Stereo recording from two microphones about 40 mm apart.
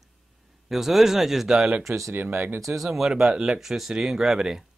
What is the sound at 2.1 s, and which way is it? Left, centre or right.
Speech, right.